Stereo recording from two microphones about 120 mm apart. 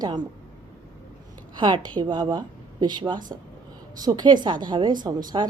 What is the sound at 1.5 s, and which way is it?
A woman's voice, 40° right (ahead or behind).